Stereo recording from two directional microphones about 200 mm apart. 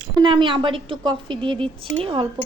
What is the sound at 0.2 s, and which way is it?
A woman's voice, 25° right (ahead or behind).